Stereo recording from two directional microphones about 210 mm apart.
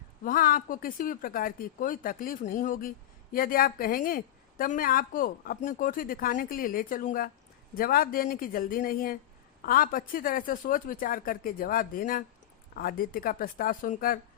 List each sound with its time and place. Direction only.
0.3 s a woman's voice: 40° left (ahead or behind)